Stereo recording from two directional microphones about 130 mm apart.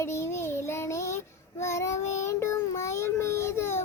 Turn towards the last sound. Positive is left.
turn(degrees=20)  # may be behind; listen again after turning